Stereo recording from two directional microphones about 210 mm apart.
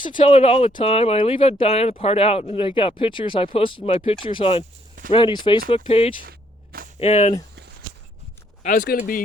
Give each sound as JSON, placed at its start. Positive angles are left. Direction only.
{"t": 0.0, "sound": "speech", "side_deg": 25}
{"t": 8.6, "sound": "speech", "side_deg": 40}